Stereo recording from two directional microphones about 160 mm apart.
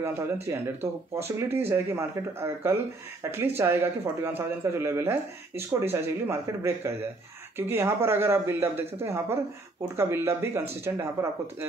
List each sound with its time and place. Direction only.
0.0 s speech: 15° right (ahead or behind)